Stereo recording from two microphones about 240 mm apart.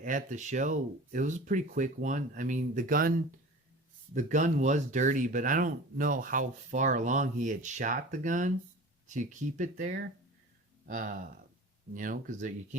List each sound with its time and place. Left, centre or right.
0.0 s speech: right